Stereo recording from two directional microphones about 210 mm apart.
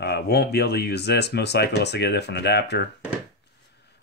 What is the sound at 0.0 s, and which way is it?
Speech, 50° left (ahead or behind).